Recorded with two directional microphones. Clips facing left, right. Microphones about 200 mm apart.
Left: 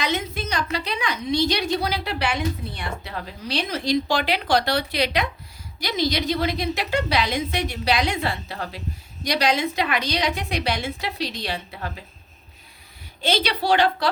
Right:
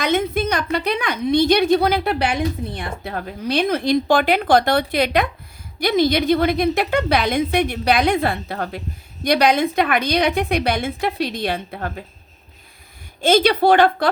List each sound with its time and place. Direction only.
0.0 s a woman's voice: 55° right (ahead or behind)
13.2 s speech: 50° right (ahead or behind)